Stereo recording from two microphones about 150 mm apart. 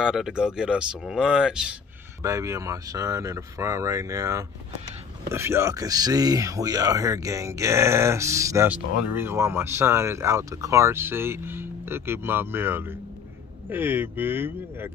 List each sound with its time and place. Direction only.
0.0 s speech: 5° right (ahead or behind)
2.2 s speech: 20° right (ahead or behind)
8.6 s speech: 10° right (ahead or behind)